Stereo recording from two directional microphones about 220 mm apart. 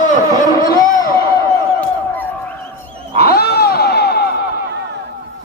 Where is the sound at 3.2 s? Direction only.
45° left (ahead or behind).